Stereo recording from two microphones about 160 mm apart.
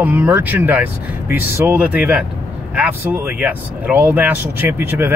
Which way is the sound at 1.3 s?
75° left (ahead or behind).